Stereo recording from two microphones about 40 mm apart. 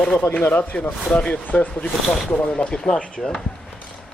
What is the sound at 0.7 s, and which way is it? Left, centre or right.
Speech, left.